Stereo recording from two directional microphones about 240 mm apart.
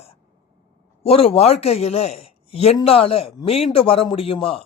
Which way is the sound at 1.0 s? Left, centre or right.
Left.